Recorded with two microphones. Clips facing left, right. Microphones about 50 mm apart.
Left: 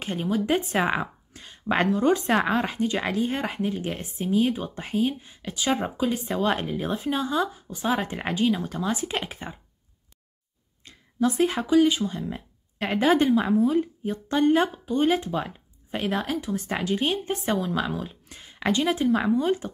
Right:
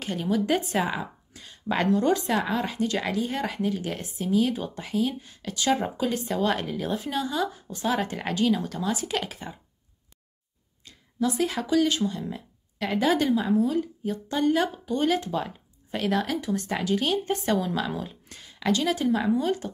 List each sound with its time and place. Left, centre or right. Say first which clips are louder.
0.1 s a woman's voice: even; left
0.7 s a woman's voice: left 3 dB; left
2.2 s a woman's voice: left 3 dB; left
5.2 s a woman's voice: right 1 dB; centre
7.7 s a woman's voice: left 1 dB; centre
10.8 s speech: left 3 dB; left
14.9 s a woman's voice: left 2 dB; centre
17.7 s speech: left 1 dB; centre
18.4 s a woman's voice: left 1 dB; left